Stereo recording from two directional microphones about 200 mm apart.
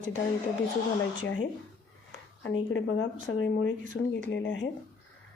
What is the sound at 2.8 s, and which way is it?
A woman's voice, 70° left (ahead or behind).